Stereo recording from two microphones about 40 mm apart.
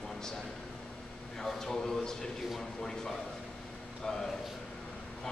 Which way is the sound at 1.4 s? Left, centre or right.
Centre.